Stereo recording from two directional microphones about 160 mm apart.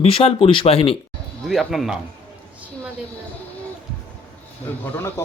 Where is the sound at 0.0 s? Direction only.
40° left (ahead or behind).